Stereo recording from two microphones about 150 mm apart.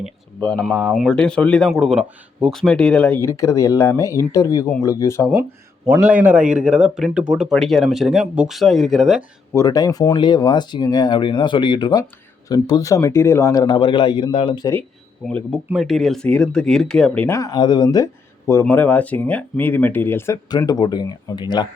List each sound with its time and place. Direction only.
0.3 s speech: 10° left (ahead or behind)
5.2 s speech: 10° right (ahead or behind)
9.6 s speech: 25° left (ahead or behind)
15.3 s speech: 5° left (ahead or behind)
17.2 s speech: 20° left (ahead or behind)
20.6 s speech: 30° left (ahead or behind)